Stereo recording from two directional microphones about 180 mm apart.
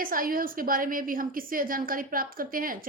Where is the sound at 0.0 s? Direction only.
50° right (ahead or behind).